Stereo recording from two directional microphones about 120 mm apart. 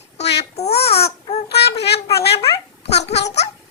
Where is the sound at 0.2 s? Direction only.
65° left (ahead or behind).